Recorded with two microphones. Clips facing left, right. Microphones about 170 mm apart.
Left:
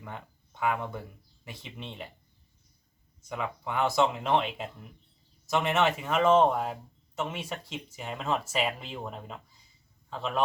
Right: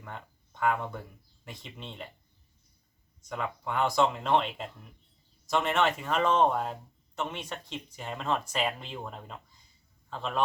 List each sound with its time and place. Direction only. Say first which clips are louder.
0.0 s speech: left 1 dB; 5° left (ahead or behind)
3.2 s speech: even; 5° left (ahead or behind)